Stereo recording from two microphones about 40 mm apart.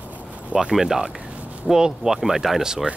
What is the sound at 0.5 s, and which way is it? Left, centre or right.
Speech, centre.